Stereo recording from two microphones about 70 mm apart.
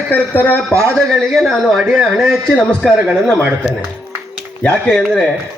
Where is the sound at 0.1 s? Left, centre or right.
Left.